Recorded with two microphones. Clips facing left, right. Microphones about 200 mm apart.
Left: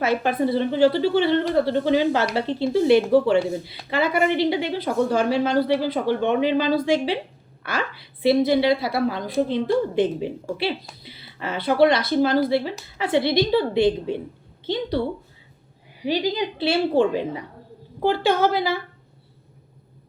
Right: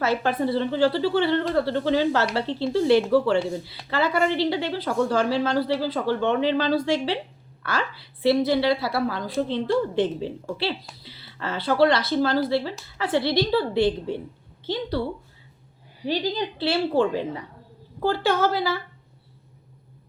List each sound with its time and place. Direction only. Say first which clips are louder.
0.0 s a woman's voice: left 2 dB; 15° left (ahead or behind)